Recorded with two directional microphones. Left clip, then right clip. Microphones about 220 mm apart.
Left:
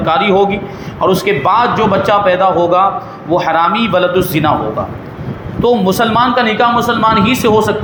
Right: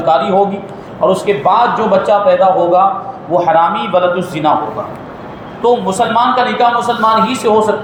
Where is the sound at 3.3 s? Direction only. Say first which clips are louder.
Right 1 dB; 45° left (ahead or behind).